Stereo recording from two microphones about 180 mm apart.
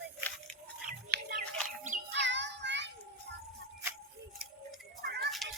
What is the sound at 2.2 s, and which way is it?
Child singing, 80° right.